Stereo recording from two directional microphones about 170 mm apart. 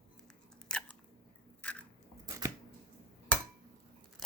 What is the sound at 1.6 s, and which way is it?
Biting, 5° left (ahead or behind).